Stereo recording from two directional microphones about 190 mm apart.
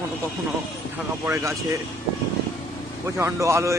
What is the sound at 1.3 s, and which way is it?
Speech, 15° right (ahead or behind).